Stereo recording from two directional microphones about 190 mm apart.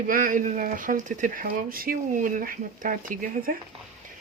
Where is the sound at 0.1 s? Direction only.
45° right (ahead or behind).